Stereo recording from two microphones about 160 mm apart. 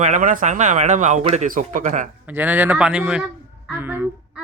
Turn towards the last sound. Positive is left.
turn(degrees=-10)  # may be behind; listen again after turning